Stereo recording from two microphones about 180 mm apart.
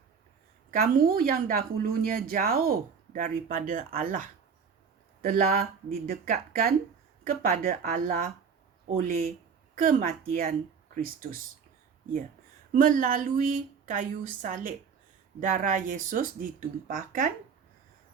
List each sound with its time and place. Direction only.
0.7 s speech: 55° right (ahead or behind)
12.7 s speech: 50° right (ahead or behind)